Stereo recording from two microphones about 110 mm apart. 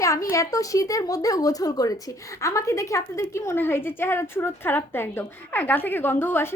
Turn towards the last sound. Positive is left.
turn(degrees=20)  # may be behind; listen again after turning